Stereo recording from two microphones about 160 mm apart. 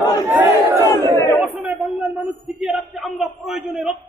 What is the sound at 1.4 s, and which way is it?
Chatter, 10° right (ahead or behind).